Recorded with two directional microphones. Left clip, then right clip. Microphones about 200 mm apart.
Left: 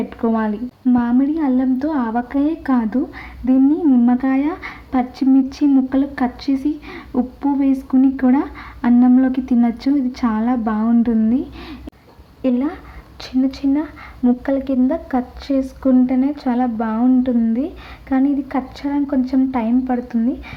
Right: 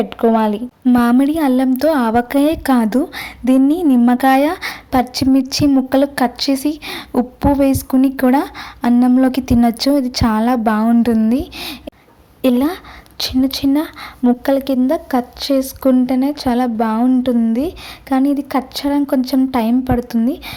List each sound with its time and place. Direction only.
0.2 s a woman's voice: 40° right (ahead or behind)